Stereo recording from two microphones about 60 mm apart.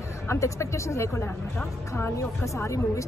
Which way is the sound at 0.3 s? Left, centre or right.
Left.